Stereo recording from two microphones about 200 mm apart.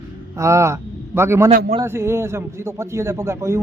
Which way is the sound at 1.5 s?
50° right (ahead or behind).